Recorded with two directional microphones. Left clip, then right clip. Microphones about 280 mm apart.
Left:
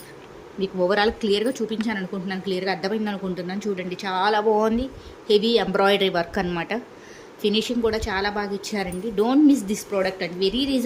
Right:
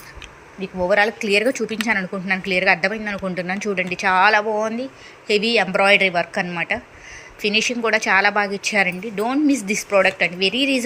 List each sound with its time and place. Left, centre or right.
0.6 s a woman's voice: centre